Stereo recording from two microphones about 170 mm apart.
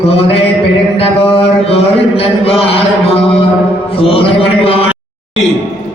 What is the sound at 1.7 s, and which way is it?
Mantra, 35° left (ahead or behind).